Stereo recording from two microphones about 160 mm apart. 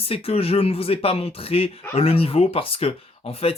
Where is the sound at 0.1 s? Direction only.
35° left (ahead or behind).